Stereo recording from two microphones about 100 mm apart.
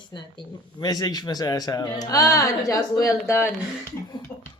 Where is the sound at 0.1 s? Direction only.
50° left (ahead or behind); by 3.5 s 25° left (ahead or behind).